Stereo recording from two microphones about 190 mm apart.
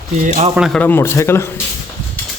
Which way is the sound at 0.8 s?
10° left (ahead or behind).